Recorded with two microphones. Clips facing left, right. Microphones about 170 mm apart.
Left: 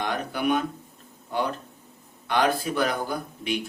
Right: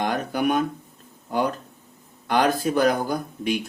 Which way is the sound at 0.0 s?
45° right (ahead or behind).